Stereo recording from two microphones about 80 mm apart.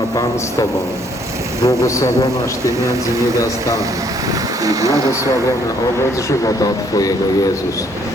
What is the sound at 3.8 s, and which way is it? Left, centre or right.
Vehicle, right.